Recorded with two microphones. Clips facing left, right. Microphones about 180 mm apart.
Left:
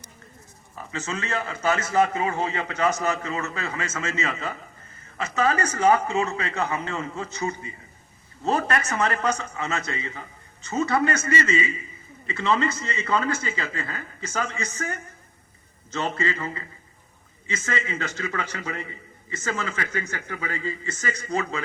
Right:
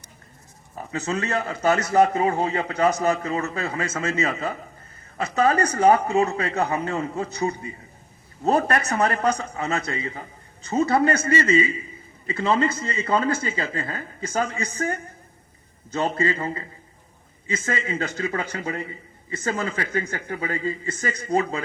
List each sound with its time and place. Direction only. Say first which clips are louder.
0.8 s a man's voice: right 5 dB; 35° right (ahead or behind)
12.5 s speech: right 3 dB; 55° right (ahead or behind)
12.8 s a man's voice: right 3 dB; 30° right (ahead or behind)
13.9 s speech: right 4 dB; 50° right (ahead or behind)
14.5 s a man's voice: right 4 dB; 35° right (ahead or behind)
16.0 s a man's voice: right 4 dB; 35° right (ahead or behind)